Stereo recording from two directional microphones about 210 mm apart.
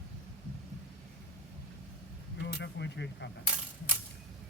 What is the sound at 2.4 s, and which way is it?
Speech, 55° left (ahead or behind).